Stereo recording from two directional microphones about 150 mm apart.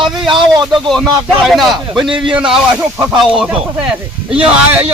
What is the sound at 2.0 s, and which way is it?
Speech, 35° right (ahead or behind).